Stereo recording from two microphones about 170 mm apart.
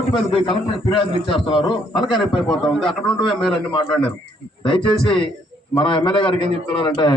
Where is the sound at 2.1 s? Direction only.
Centre (ahead or behind).